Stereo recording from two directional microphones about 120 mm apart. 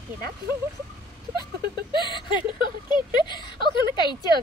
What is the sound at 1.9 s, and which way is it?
A woman's voice, 40° left (ahead or behind).